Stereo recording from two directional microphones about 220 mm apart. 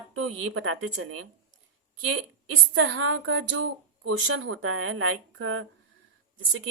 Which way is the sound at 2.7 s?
60° right (ahead or behind).